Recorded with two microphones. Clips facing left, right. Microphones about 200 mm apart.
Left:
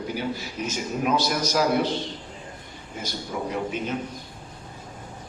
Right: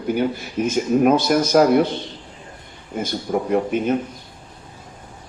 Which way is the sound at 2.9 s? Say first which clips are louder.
Right 9 dB; 55° right (ahead or behind).